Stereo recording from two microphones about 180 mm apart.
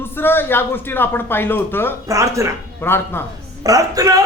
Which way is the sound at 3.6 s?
20° right (ahead or behind).